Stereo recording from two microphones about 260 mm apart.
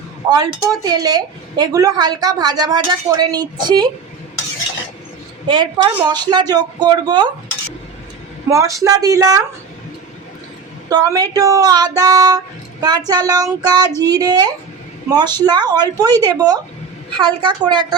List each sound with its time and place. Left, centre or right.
0.3 s a woman's voice: centre
5.5 s a woman's voice: centre
8.4 s a woman's voice: centre
10.8 s a woman's voice: centre